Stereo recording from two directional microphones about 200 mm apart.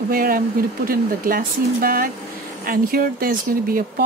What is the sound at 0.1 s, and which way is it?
Speech, 45° right (ahead or behind).